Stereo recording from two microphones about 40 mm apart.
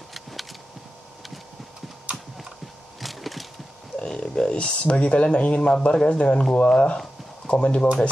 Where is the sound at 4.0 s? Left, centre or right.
Centre.